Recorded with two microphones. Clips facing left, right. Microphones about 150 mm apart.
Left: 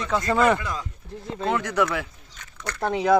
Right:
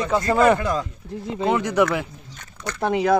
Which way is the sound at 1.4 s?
15° right (ahead or behind).